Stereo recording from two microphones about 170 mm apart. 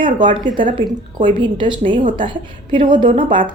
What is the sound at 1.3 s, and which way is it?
A woman's voice, 30° right (ahead or behind).